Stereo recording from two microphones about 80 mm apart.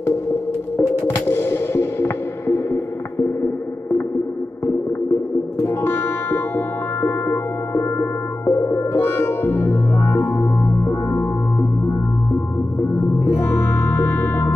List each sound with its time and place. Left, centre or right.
0.7 s music: left
5.6 s music: left
13.4 s music: left